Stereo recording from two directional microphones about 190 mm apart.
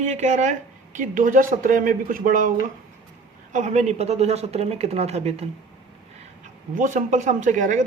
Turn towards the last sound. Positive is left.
turn(degrees=-40)  # may be behind; listen again after turning